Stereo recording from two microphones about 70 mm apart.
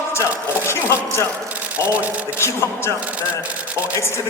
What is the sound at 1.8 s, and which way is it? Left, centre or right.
Speech, right.